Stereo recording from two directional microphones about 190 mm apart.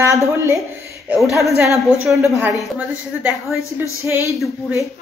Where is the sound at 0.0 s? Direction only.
15° right (ahead or behind).